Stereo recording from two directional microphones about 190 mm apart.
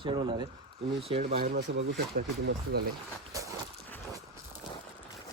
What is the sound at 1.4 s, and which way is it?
Speech, 50° right (ahead or behind).